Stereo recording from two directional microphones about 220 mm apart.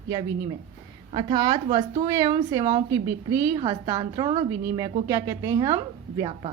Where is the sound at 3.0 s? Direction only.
15° right (ahead or behind).